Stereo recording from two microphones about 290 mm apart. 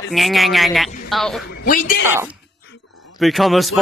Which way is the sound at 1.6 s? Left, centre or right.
Left.